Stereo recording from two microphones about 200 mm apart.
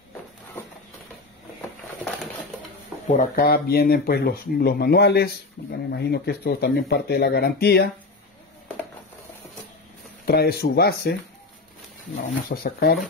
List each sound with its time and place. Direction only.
3.2 s speech: 45° left (ahead or behind)
10.2 s speech: 50° left (ahead or behind)
12.4 s speech: 50° left (ahead or behind)